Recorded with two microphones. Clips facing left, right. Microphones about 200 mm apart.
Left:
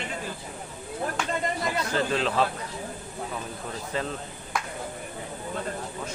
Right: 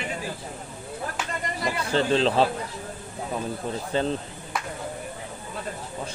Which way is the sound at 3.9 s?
30° right (ahead or behind).